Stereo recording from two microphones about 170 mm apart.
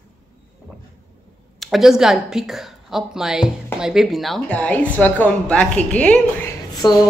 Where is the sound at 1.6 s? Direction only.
Centre (ahead or behind).